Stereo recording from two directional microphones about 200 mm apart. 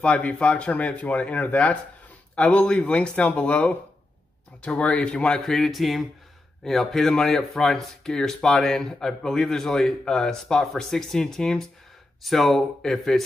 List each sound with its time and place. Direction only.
0.0 s speech: 5° left (ahead or behind)